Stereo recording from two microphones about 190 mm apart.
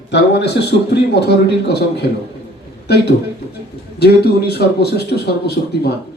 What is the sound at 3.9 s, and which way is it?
Speech, 60° left (ahead or behind).